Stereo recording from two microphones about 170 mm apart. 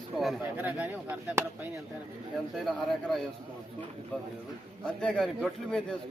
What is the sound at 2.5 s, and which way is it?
Speech, centre (ahead or behind).